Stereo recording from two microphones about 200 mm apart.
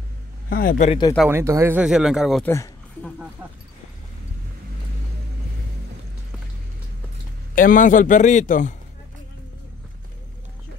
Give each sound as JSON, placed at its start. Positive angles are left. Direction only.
{"t": 0.5, "sound": "speech", "side_deg": 45}
{"t": 0.8, "sound": "speech", "side_deg": 20}
{"t": 1.3, "sound": "speech", "side_deg": -15}
{"t": 2.4, "sound": "speech", "side_deg": 15}
{"t": 7.5, "sound": "speech", "side_deg": 40}